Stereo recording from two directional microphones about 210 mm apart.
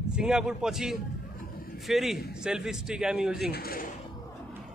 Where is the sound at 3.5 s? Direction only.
45° left (ahead or behind).